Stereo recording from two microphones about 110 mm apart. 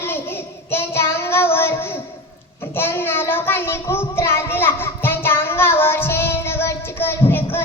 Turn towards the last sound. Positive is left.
turn(degrees=20)  # may be behind; listen again after turning